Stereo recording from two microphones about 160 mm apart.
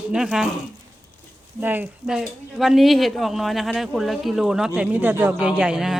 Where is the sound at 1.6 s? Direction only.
10° right (ahead or behind).